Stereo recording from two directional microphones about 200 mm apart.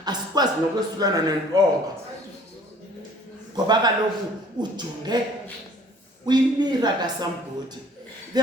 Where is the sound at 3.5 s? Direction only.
20° right (ahead or behind).